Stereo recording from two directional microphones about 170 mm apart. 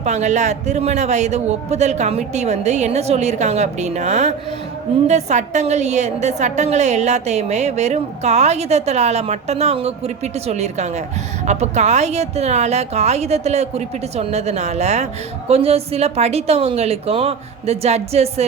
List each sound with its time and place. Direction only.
0.0 s a man's voice: 45° right (ahead or behind)